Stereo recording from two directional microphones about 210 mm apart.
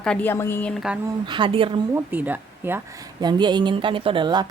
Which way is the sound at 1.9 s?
10° right (ahead or behind).